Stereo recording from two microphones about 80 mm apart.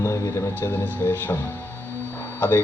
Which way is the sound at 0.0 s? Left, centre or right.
Left.